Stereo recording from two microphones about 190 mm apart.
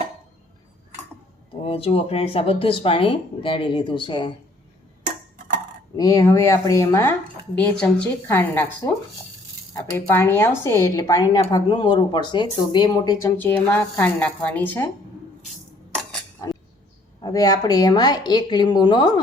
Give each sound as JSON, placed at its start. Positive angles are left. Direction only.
{"t": 1.6, "sound": "speech", "side_deg": 30}
{"t": 6.0, "sound": "speech", "side_deg": 20}
{"t": 17.2, "sound": "speech", "side_deg": 20}